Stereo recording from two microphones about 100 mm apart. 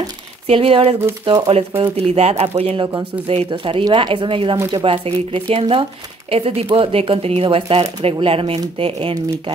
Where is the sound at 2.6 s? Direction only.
70° right (ahead or behind).